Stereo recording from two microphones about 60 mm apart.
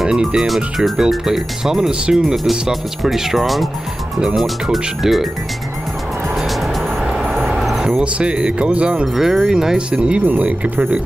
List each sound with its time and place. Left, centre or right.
0.0 s speech: centre
2.3 s speech: centre
4.6 s speech: centre
7.2 s vehicle: centre
8.0 s speech: centre
9.0 s speech: centre; by 11.0 s right